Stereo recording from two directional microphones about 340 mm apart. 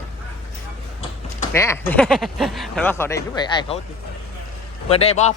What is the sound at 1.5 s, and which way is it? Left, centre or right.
Speech, centre.